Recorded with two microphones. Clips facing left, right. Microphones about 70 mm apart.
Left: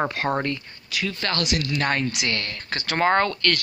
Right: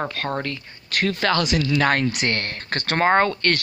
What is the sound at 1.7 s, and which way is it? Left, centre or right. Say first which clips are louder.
Speech: right 5 dB; right.